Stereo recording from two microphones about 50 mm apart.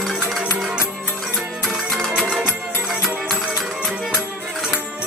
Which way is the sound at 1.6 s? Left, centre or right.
Centre.